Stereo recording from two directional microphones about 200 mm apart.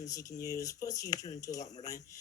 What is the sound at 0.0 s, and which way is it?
Speech, 15° left (ahead or behind).